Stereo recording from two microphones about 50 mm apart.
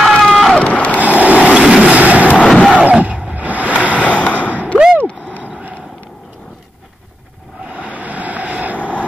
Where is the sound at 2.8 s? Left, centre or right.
Right.